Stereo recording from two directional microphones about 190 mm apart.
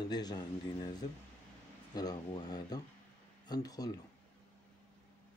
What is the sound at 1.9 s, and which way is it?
Speech, 20° left (ahead or behind).